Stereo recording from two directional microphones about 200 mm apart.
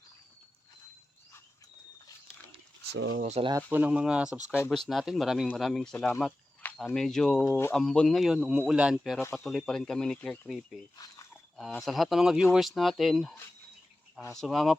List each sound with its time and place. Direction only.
2.9 s speech: 70° right (ahead or behind)
3.2 s speech: 35° right (ahead or behind)
3.5 s speech: 10° right (ahead or behind)
4.5 s speech: 10° left (ahead or behind)
4.9 s speech: centre (ahead or behind)
10.9 s speech: 20° left (ahead or behind)
11.5 s speech: centre (ahead or behind)
14.3 s speech: centre (ahead or behind)